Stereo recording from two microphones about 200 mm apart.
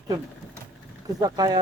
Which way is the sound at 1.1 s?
20° right (ahead or behind).